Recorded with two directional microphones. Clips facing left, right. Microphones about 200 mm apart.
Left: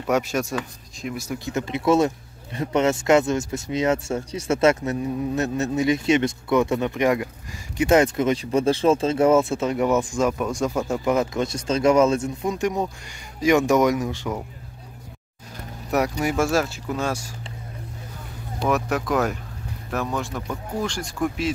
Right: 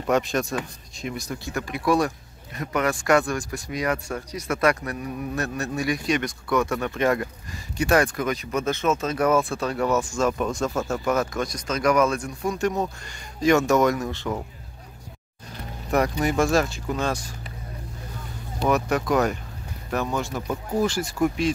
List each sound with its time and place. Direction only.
0.0 s speech: 10° left (ahead or behind)
1.4 s speech: 20° left (ahead or behind)
15.9 s speech: 5° left (ahead or behind)
18.6 s speech: centre (ahead or behind)